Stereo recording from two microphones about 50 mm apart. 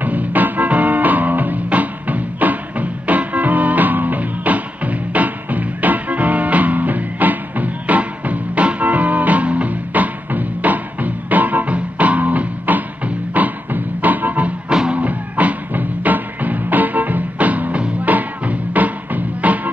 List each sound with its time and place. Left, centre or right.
0.0 s music: right
14.7 s music: centre
15.0 s music: right